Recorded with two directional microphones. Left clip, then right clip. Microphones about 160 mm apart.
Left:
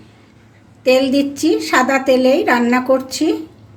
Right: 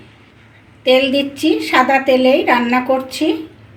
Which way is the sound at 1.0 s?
50° left (ahead or behind).